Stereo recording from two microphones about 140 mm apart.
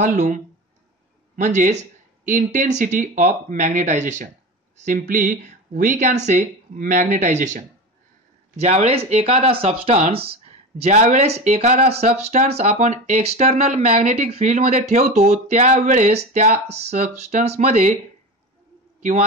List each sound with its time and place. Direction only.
0.0 s speech: 60° right (ahead or behind)